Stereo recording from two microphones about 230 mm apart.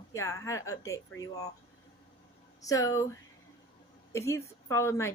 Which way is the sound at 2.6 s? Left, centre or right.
Centre.